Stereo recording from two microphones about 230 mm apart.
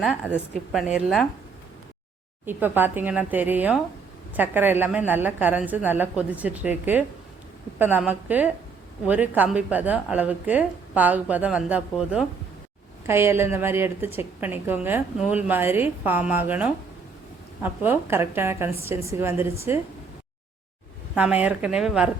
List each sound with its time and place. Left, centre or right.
0.0 s a woman's voice: centre
2.5 s a woman's voice: centre
21.2 s a woman's voice: centre